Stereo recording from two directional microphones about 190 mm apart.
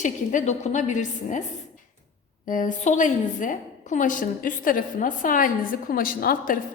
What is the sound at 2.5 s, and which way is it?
A woman's voice, 45° left (ahead or behind).